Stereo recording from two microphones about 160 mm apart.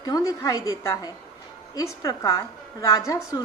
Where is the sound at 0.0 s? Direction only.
20° left (ahead or behind).